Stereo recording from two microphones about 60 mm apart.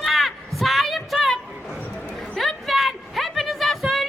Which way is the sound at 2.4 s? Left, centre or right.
Centre.